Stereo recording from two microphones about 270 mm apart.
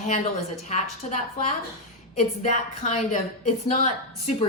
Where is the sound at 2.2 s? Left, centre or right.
Left.